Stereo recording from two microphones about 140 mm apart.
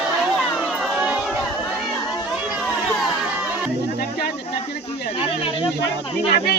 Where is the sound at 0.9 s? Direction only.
10° right (ahead or behind).